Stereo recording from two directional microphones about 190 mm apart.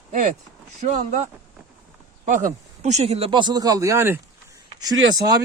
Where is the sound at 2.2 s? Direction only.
40° right (ahead or behind); by 4.2 s 15° right (ahead or behind).